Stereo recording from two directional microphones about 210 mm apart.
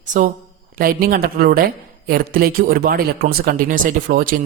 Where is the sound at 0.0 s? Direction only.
35° right (ahead or behind).